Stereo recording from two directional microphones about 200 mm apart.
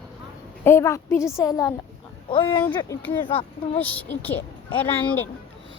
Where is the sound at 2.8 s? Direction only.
10° left (ahead or behind).